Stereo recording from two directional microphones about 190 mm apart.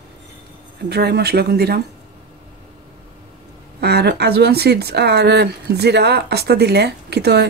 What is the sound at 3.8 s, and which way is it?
Speech, 60° right (ahead or behind).